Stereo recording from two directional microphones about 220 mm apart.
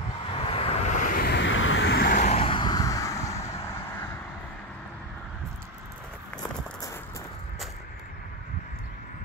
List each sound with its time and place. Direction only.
0.3 s vehicle: 25° left (ahead or behind)